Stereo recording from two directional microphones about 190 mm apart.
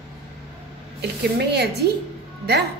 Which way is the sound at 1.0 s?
60° right (ahead or behind).